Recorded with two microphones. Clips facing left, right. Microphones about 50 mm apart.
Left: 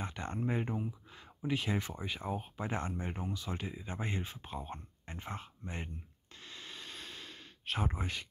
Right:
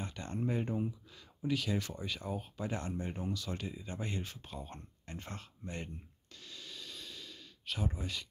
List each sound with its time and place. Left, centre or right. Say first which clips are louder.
0.0 s speech: left 1 dB; left
6.4 s sigh: left 1 dB; left